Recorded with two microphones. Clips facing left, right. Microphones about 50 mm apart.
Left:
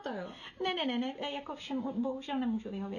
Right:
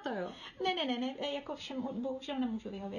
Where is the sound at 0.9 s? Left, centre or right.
Centre.